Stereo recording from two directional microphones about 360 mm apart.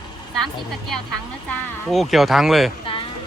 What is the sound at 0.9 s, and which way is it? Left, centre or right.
Speech, right.